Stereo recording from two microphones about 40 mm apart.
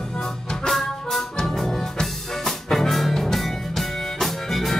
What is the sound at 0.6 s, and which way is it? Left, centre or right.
Music, centre.